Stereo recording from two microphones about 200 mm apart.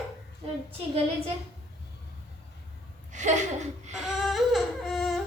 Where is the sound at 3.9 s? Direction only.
Centre (ahead or behind).